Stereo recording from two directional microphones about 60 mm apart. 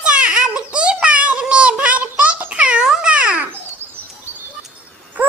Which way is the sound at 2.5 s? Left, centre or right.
Centre.